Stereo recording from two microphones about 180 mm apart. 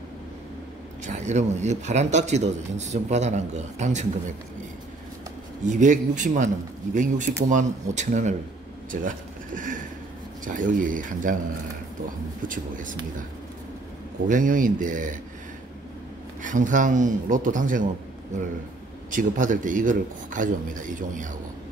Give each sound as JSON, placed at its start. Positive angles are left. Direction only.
{"t": 1.0, "sound": "a man's voice", "side_deg": -40}
{"t": 5.7, "sound": "a man's voice", "side_deg": -45}
{"t": 12.4, "sound": "speech", "side_deg": -45}
{"t": 14.2, "sound": "speech", "side_deg": -45}
{"t": 16.4, "sound": "speech", "side_deg": -45}
{"t": 19.0, "sound": "speech", "side_deg": -45}